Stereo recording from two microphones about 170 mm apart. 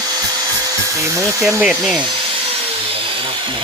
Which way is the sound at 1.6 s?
Centre (ahead or behind).